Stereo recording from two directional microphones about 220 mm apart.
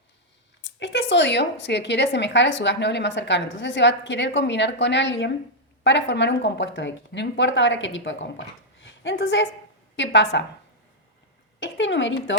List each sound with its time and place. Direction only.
0.8 s speech: 55° left (ahead or behind)
11.6 s speech: 55° left (ahead or behind)